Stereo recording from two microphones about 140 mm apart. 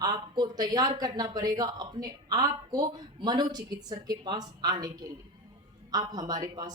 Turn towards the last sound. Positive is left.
turn(degrees=-30)  # may be behind; listen again after turning